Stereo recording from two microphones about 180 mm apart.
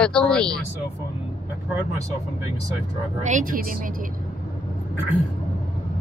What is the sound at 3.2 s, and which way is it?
Speech, 45° right (ahead or behind).